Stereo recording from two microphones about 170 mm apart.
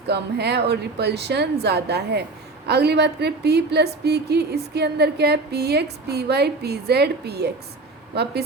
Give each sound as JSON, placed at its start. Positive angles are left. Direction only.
{"t": 0.1, "sound": "a woman's voice", "side_deg": -75}